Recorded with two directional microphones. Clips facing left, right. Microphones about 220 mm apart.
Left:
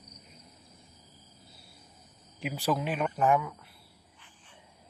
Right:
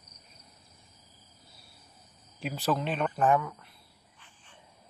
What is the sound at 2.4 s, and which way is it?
Speech, 10° left (ahead or behind).